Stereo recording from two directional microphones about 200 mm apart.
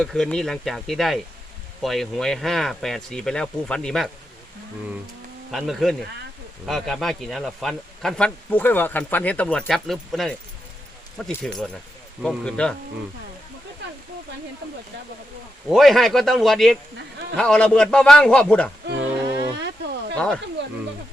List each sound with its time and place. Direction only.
0.0 s speech: 5° left (ahead or behind)
5.5 s speech: centre (ahead or behind)
15.7 s speech: centre (ahead or behind)
19.5 s a sound: 60° right (ahead or behind)
20.1 s speech: 5° left (ahead or behind)